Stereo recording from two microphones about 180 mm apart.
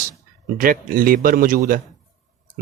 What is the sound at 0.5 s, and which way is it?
Speech, 50° right (ahead or behind).